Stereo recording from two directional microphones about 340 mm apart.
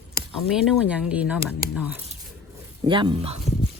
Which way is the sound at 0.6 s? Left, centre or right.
Centre.